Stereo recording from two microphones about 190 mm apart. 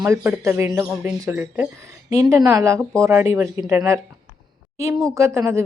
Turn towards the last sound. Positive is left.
turn(degrees=-15)  # may be behind; listen again after turning